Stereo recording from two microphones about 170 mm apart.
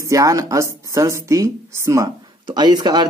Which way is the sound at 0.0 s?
20° right (ahead or behind).